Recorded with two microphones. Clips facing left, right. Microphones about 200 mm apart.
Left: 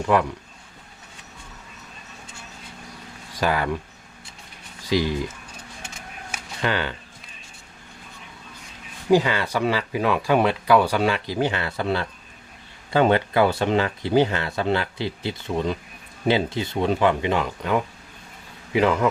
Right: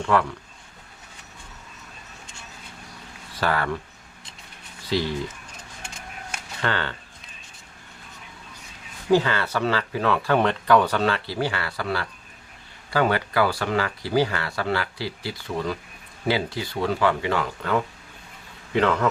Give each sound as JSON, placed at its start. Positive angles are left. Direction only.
{"t": 0.0, "sound": "speech", "side_deg": 15}
{"t": 3.4, "sound": "speech", "side_deg": 15}
{"t": 4.9, "sound": "speech", "side_deg": 15}
{"t": 6.3, "sound": "camera", "side_deg": 10}
{"t": 9.0, "sound": "speech", "side_deg": 15}